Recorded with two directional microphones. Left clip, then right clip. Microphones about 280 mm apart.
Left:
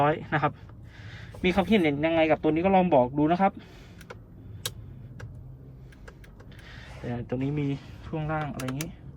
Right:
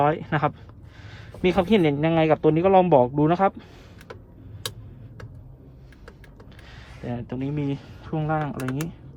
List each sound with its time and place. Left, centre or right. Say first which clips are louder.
0.0 s speech: right 3 dB; centre
6.7 s speech: right 2 dB; centre